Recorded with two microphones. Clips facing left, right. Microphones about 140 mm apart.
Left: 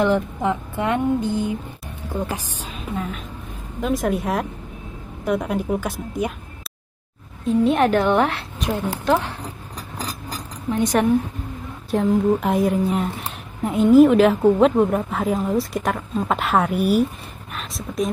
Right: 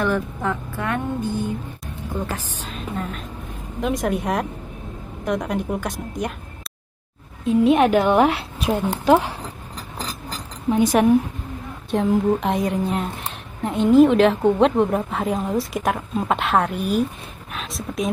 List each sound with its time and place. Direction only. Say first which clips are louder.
0.0 s a sound: left 3 dB; 20° left (ahead or behind)
2.1 s a woman's voice: left 2 dB; 10° left (ahead or behind)
7.4 s a woman's voice: right 2 dB; centre (ahead or behind)
10.7 s a woman's voice: right 2 dB; 5° right (ahead or behind)